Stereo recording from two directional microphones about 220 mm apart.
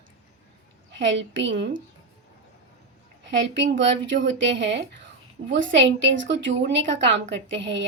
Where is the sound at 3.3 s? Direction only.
55° right (ahead or behind).